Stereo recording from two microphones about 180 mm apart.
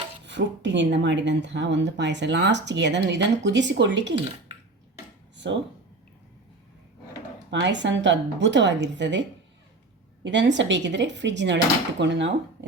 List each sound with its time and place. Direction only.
0.3 s speech: 80° right
7.5 s a woman's voice: 80° right
10.2 s a woman's voice: 80° right